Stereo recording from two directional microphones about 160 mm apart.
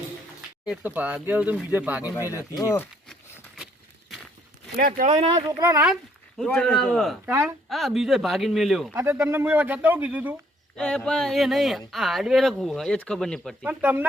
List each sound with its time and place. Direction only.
0.7 s speech: 10° right (ahead or behind)
2.4 s speech: 20° left (ahead or behind)
3.1 s a sound: centre (ahead or behind)
4.8 s speech: 65° right (ahead or behind)
5.0 s speech: 40° right (ahead or behind)
5.5 s speech: 20° right (ahead or behind)
6.4 s speech: 5° left (ahead or behind)
8.9 s speech: 15° right (ahead or behind)
10.8 s speech: 5° left (ahead or behind)
13.7 s speech: 10° right (ahead or behind)